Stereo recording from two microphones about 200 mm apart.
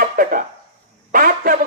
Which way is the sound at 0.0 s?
45° right (ahead or behind).